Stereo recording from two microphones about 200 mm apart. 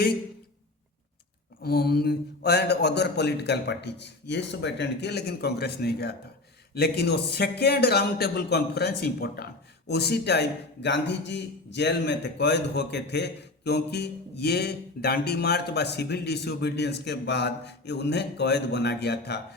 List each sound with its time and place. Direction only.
1.6 s a man's voice: 50° left (ahead or behind)